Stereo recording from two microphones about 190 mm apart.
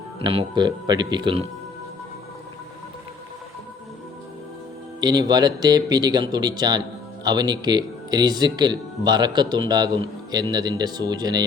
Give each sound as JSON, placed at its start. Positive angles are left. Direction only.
{"t": 0.2, "sound": "speech", "side_deg": -25}
{"t": 4.9, "sound": "speech", "side_deg": -20}